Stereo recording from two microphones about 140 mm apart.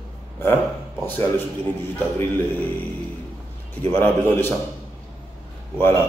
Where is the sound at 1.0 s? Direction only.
15° left (ahead or behind).